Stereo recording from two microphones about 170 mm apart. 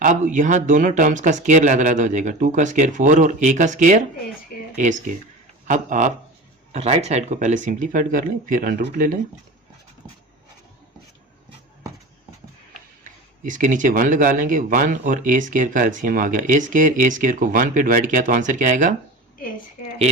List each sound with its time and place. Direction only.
0.0 s speech: 45° right (ahead or behind)
5.6 s speech: 50° right (ahead or behind)
13.5 s speech: 50° right (ahead or behind)